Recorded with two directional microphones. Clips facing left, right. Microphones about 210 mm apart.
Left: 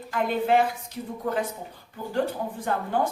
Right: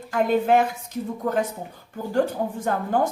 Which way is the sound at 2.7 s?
50° right (ahead or behind).